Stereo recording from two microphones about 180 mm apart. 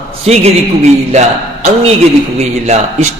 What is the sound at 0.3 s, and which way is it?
A man's voice, 35° right (ahead or behind).